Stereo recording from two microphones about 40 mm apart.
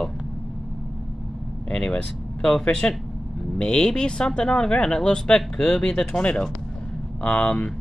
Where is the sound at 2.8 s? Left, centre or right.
Left.